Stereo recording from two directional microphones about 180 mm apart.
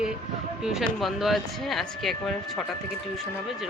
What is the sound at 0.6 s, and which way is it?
Speech, centre (ahead or behind).